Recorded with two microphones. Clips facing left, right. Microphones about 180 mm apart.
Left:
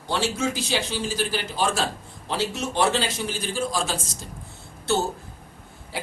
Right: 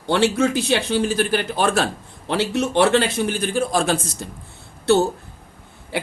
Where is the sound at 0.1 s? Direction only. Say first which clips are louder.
Right 7 dB; 60° right (ahead or behind).